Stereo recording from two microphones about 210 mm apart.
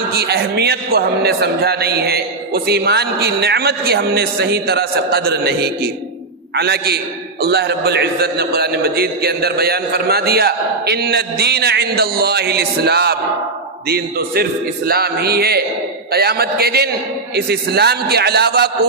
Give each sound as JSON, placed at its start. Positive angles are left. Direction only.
{"t": 0.1, "sound": "a man's voice", "side_deg": -50}